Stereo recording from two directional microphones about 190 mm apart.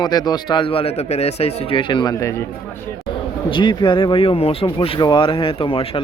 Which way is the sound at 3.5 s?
25° left (ahead or behind).